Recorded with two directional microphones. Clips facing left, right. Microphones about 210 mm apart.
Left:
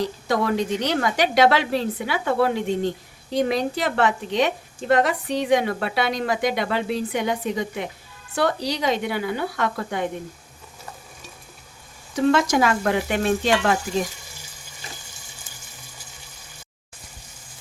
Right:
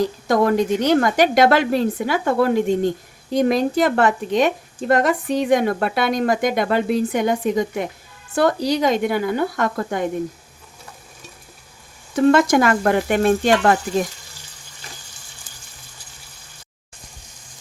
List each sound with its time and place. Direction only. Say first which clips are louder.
0.3 s speech: right 5 dB; 50° right (ahead or behind)
12.1 s speech: right 5 dB; 55° right (ahead or behind)